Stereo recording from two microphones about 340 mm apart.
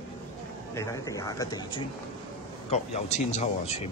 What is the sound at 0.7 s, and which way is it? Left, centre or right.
Speech, centre.